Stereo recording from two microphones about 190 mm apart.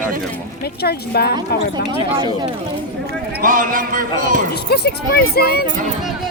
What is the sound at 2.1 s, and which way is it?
Speech, 25° right (ahead or behind).